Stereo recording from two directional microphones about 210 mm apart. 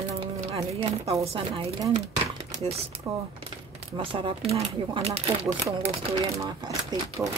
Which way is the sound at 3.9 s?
25° right (ahead or behind).